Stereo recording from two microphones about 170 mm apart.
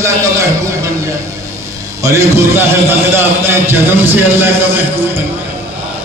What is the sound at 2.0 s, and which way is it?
Speech, 15° right (ahead or behind).